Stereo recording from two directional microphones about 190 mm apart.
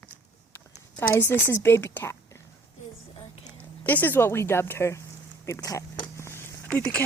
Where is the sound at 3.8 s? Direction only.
10° left (ahead or behind).